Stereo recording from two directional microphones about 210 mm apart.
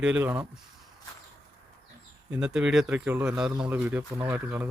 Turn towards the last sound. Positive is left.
turn(degrees=-10)  # may be behind; listen again after turning